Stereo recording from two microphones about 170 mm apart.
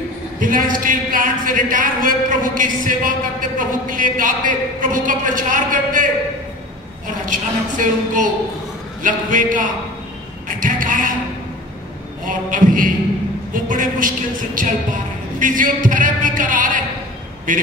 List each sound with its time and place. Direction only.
0.4 s speech: 55° right (ahead or behind)
7.2 s speech: 50° right (ahead or behind)
10.6 s a sound: 50° right (ahead or behind)
12.3 s a woman's voice: 50° right (ahead or behind)